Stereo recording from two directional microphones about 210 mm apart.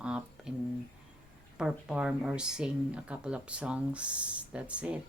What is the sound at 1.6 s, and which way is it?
Speech, 5° right (ahead or behind).